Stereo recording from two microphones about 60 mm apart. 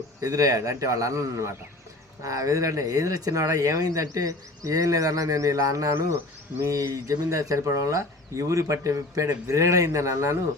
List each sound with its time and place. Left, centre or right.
0.2 s speech: right
2.2 s speech: right
6.9 s speech: right